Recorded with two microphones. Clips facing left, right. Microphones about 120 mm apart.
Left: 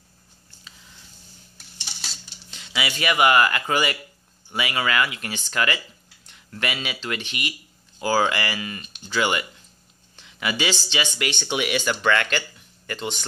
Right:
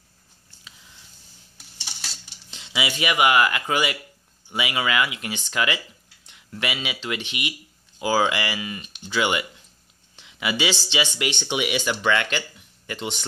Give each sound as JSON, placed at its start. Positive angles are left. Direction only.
{"t": 2.5, "sound": "speech", "side_deg": -20}
{"t": 10.1, "sound": "a sound", "side_deg": -15}
{"t": 10.9, "sound": "speech", "side_deg": -20}